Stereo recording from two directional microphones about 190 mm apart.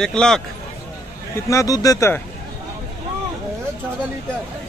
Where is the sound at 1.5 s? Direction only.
15° left (ahead or behind).